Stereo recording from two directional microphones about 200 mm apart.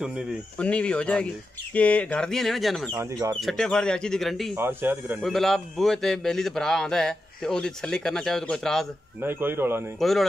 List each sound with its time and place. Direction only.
0.0 s a man's voice: centre (ahead or behind)
2.9 s speech: 20° right (ahead or behind)
3.3 s a man's voice: centre (ahead or behind)
4.6 s a man's voice: 10° right (ahead or behind)
9.2 s speech: 10° right (ahead or behind)
9.9 s a man's voice: centre (ahead or behind)